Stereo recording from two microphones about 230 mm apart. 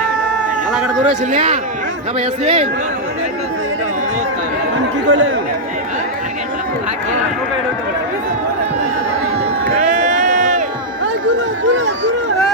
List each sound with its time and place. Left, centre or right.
0.7 s a man's voice: centre
1.0 s a man's voice: right
5.0 s speech: right
9.7 s crowd: right